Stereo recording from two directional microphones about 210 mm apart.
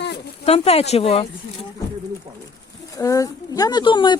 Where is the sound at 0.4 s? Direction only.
30° left (ahead or behind).